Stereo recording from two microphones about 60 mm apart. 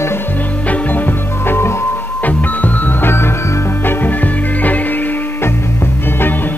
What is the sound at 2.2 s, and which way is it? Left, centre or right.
Music, left.